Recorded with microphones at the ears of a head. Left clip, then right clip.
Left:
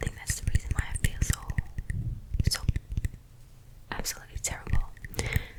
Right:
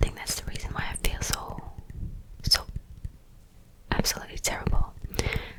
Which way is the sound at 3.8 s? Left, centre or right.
Right.